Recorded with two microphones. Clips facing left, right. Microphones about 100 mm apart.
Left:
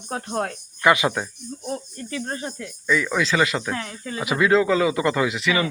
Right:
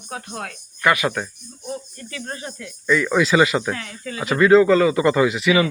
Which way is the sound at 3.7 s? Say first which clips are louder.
Even; 30° left (ahead or behind).